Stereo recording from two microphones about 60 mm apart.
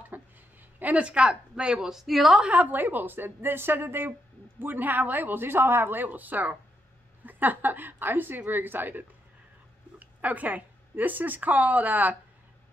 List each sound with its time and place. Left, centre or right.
0.1 s a sound: right
0.7 s a woman's voice: right; by 2.3 s centre
2.5 s a woman's voice: right